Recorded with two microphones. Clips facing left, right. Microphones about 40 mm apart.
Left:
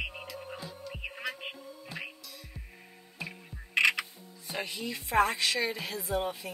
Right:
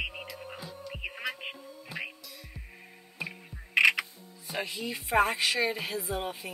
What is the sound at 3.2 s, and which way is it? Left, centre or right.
Music, centre.